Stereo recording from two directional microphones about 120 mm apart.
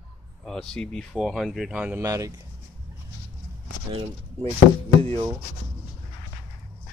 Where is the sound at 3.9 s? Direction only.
50° right (ahead or behind).